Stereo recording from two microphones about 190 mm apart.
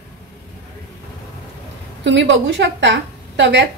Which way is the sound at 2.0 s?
70° right (ahead or behind).